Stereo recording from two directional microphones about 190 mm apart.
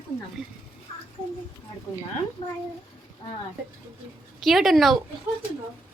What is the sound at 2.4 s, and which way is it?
Speech, 20° left (ahead or behind).